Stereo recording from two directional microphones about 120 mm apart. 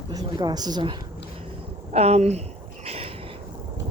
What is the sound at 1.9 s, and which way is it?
Speech, 60° right (ahead or behind).